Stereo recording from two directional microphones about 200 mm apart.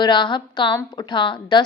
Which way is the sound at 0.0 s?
25° left (ahead or behind).